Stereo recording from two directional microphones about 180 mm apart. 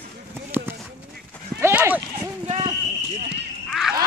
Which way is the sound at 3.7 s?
Centre (ahead or behind).